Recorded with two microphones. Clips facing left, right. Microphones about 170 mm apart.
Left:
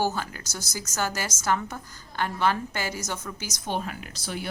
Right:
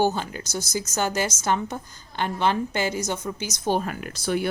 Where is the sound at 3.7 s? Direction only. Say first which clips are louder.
Right 6 dB; 45° right (ahead or behind).